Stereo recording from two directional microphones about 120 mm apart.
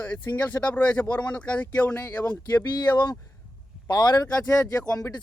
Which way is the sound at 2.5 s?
35° left (ahead or behind).